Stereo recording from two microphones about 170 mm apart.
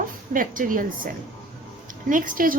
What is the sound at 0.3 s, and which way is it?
A woman's voice, 55° right (ahead or behind).